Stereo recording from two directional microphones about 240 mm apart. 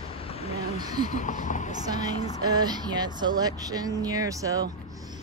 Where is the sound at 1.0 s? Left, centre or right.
Left.